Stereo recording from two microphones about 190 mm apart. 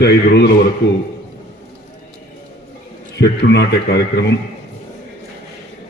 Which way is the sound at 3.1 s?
65° left (ahead or behind).